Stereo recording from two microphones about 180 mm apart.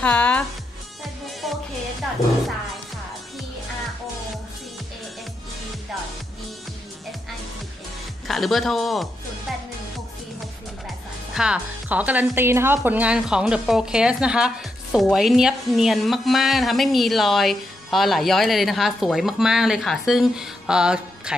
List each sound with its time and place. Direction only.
0.0 s music: 5° left (ahead or behind)
8.3 s speech: centre (ahead or behind)
9.5 s music: centre (ahead or behind)
11.3 s speech: 5° right (ahead or behind)